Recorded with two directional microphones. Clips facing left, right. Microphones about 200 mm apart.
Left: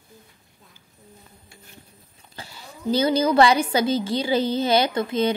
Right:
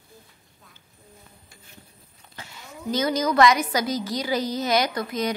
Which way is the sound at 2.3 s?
35° left (ahead or behind).